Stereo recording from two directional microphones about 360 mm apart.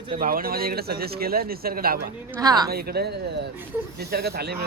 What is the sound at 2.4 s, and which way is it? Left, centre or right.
Speech, centre.